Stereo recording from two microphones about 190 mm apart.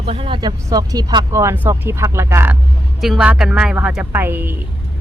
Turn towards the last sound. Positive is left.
turn(degrees=-10)  # may be behind; listen again after turning